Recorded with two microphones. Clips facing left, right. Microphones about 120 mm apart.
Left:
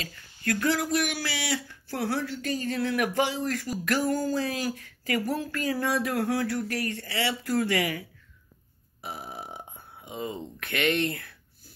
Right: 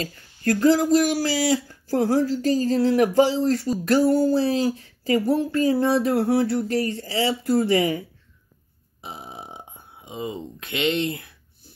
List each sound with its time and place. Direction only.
0.0 s speech: 35° right (ahead or behind)
9.0 s burping: 20° right (ahead or behind)